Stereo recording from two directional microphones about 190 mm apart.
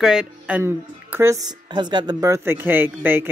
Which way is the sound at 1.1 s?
20° right (ahead or behind).